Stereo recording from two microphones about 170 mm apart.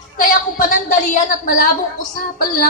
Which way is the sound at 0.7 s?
50° left (ahead or behind).